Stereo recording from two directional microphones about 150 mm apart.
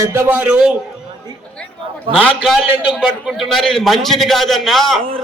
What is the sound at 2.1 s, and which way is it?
A man's voice, centre (ahead or behind).